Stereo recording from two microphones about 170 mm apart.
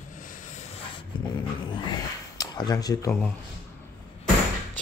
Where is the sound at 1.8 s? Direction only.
20° left (ahead or behind).